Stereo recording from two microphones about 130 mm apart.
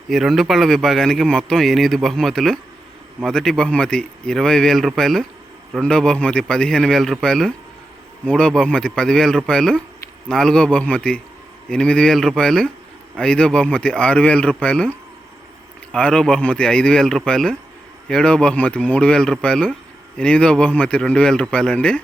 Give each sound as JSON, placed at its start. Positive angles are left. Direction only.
{"t": 0.1, "sound": "a man's voice", "side_deg": 0}